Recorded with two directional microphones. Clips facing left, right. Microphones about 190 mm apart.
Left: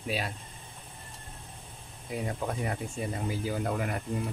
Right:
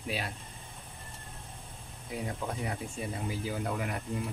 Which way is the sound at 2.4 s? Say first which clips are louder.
Left 4 dB; 50° left (ahead or behind).